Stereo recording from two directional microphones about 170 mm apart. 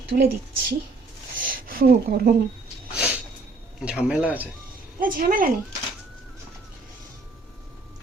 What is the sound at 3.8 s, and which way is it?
Speech, 5° right (ahead or behind).